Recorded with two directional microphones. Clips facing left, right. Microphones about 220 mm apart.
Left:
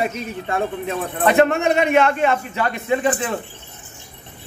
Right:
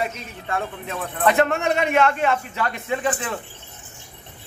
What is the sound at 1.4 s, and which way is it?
A man's voice, 5° left (ahead or behind).